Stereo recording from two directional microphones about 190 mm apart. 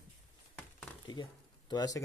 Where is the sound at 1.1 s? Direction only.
20° left (ahead or behind).